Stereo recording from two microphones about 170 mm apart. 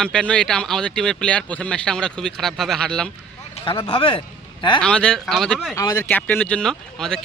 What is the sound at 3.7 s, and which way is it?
Speech, 30° left (ahead or behind).